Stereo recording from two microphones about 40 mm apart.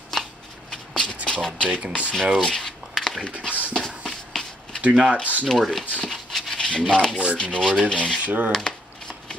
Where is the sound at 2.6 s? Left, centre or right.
Centre.